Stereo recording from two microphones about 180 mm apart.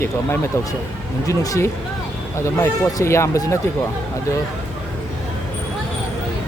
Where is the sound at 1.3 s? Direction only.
15° left (ahead or behind).